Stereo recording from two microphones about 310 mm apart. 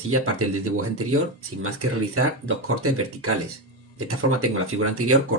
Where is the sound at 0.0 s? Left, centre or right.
Right.